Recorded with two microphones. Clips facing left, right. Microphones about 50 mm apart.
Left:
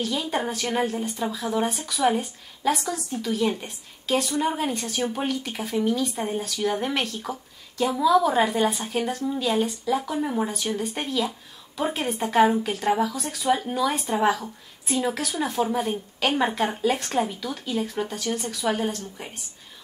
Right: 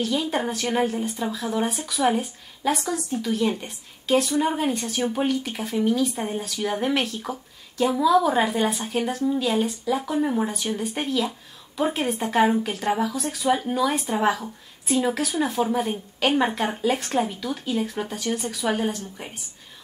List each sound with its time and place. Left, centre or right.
0.0 s a woman's voice: centre